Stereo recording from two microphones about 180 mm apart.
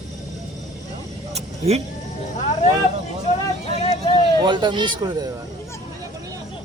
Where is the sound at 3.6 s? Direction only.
35° left (ahead or behind).